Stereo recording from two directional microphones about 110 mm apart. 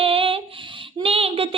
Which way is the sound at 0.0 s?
55° right (ahead or behind).